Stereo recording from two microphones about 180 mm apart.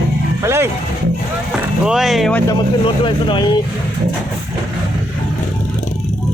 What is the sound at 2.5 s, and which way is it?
Speech, 25° left (ahead or behind).